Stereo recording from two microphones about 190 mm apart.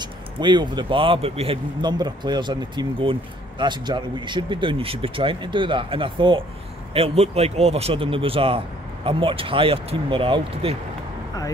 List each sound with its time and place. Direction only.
0.0 s a man's voice: 25° right (ahead or behind)